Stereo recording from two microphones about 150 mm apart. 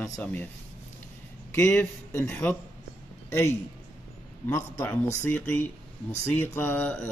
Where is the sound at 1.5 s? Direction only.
15° left (ahead or behind).